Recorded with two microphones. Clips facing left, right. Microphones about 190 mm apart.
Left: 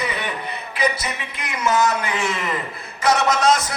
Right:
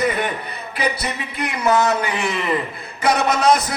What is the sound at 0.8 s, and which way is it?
Speech, 60° right (ahead or behind).